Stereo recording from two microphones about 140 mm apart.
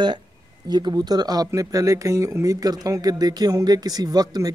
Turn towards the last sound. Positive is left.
turn(degrees=-30)  # may be behind; listen again after turning